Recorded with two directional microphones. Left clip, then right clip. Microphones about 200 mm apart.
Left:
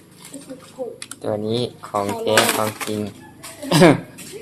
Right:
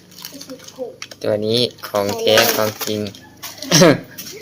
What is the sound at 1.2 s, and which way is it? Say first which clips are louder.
Speech: right 6 dB; 20° right (ahead or behind).